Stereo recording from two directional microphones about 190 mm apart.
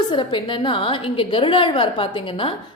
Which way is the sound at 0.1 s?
25° left (ahead or behind).